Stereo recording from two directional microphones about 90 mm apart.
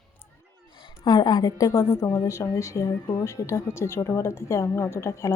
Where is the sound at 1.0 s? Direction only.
55° left (ahead or behind).